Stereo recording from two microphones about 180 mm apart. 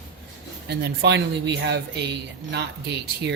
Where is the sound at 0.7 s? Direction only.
70° right (ahead or behind).